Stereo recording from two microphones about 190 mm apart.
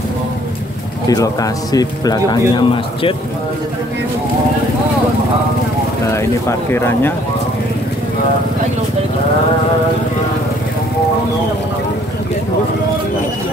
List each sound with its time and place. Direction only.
1.0 s speech: 20° left (ahead or behind)
6.7 s speech: 10° left (ahead or behind)